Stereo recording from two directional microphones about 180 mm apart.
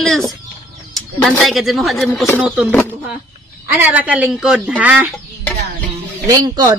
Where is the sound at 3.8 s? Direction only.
10° right (ahead or behind).